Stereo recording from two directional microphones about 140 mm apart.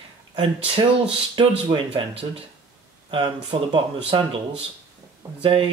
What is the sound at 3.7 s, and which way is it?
Speech, 40° right (ahead or behind).